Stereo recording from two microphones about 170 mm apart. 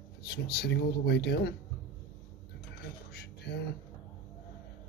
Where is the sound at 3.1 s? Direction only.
70° left (ahead or behind).